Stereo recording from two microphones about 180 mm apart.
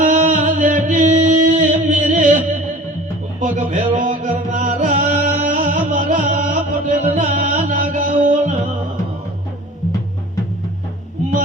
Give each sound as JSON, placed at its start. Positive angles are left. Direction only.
{"t": 0.0, "sound": "music", "side_deg": -45}
{"t": 3.4, "sound": "music", "side_deg": -45}